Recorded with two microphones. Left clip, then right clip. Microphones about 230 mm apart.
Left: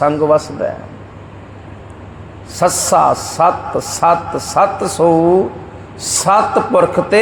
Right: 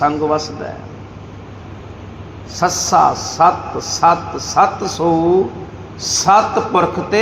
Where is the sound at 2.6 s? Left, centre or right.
Left.